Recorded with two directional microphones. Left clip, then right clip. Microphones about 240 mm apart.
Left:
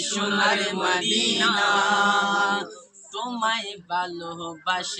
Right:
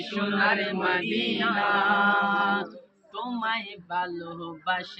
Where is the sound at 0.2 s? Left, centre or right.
Centre.